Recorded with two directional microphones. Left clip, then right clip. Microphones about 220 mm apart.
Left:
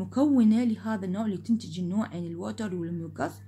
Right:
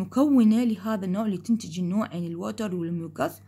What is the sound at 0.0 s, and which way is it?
Speech, 30° right (ahead or behind).